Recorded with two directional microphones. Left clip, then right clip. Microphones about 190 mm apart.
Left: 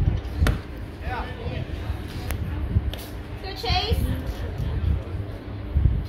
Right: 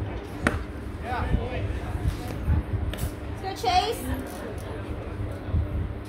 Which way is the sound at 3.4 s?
70° right (ahead or behind).